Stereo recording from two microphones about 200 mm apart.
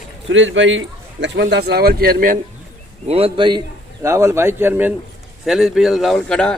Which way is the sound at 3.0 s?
30° right (ahead or behind).